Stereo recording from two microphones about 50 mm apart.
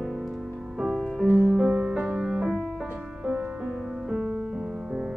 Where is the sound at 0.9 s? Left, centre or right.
Centre.